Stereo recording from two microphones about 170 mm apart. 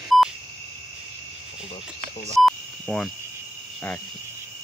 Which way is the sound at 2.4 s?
5° left (ahead or behind).